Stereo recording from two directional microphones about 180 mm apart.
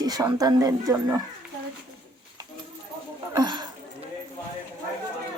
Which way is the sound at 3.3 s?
25° right (ahead or behind).